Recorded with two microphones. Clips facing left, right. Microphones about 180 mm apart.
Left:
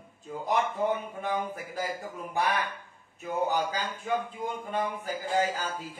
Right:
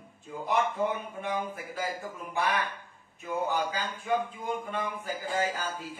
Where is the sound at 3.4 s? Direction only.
35° left (ahead or behind).